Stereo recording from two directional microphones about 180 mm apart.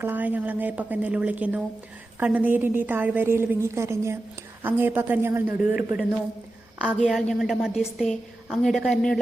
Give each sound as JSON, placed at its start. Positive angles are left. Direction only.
{"t": 0.0, "sound": "a woman's voice", "side_deg": -10}